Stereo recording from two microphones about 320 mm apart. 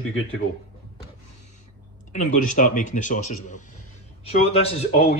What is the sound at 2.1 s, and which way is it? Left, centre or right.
Speech, left.